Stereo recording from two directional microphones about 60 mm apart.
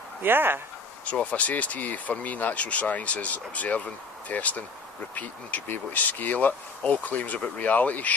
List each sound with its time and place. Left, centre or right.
0.2 s speech: right
1.0 s speech: left